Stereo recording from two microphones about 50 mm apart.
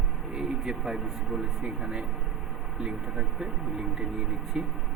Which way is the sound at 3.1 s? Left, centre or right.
Centre.